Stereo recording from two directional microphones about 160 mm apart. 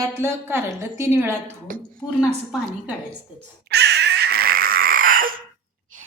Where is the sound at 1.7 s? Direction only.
60° right (ahead or behind).